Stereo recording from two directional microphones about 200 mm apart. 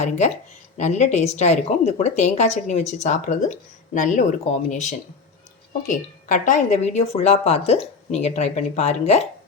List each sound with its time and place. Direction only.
0.2 s a woman's voice: 35° left (ahead or behind)